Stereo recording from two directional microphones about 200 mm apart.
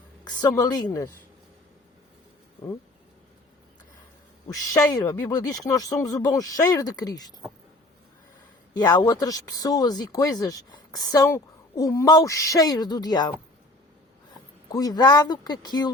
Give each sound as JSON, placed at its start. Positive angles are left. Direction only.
{"t": 0.3, "sound": "a woman's voice", "side_deg": 20}
{"t": 4.4, "sound": "speech", "side_deg": 15}
{"t": 8.7, "sound": "speech", "side_deg": 20}
{"t": 14.7, "sound": "a woman's voice", "side_deg": 20}